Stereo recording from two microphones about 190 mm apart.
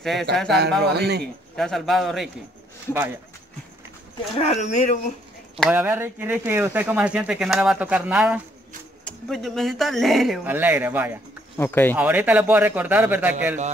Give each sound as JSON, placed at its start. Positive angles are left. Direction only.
{"t": 0.0, "sound": "speech", "side_deg": 0}
{"t": 0.9, "sound": "a man's voice", "side_deg": -60}
{"t": 1.6, "sound": "speech", "side_deg": 0}
{"t": 4.4, "sound": "speech", "side_deg": 35}
{"t": 5.7, "sound": "speech", "side_deg": -10}
{"t": 11.5, "sound": "speech", "side_deg": 10}
{"t": 11.9, "sound": "speech", "side_deg": -10}